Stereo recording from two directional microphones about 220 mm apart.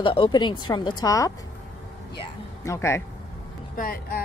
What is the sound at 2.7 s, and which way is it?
Speech, 10° left (ahead or behind).